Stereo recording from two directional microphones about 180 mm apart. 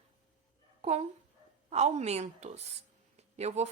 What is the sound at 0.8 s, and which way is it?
A woman's voice, 35° right (ahead or behind).